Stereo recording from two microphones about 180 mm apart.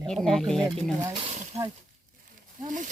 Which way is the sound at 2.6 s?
45° right (ahead or behind).